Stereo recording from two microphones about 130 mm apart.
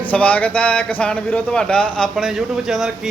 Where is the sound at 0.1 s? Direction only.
10° left (ahead or behind).